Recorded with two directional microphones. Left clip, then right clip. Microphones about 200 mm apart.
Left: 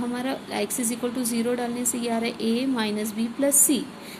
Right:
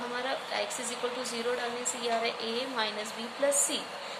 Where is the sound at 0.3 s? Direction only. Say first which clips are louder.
Left 3 dB; 50° left (ahead or behind).